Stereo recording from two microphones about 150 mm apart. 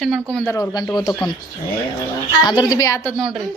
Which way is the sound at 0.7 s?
25° left (ahead or behind).